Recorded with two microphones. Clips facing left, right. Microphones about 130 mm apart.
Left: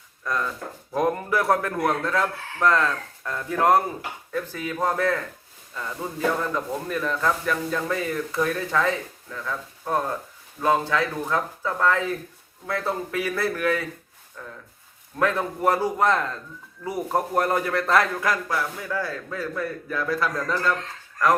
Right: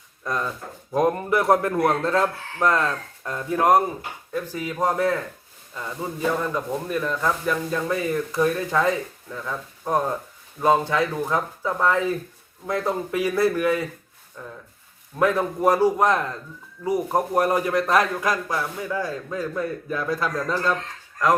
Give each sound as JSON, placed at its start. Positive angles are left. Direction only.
{"t": 0.9, "sound": "a man's voice", "side_deg": -20}